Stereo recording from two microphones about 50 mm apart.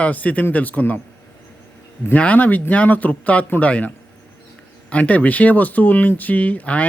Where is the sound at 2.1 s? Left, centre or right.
Left.